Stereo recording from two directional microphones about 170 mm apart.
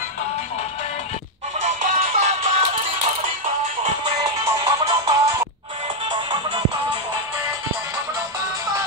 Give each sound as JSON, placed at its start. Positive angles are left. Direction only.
{"t": 1.6, "sound": "music", "side_deg": -45}
{"t": 4.0, "sound": "music", "side_deg": -25}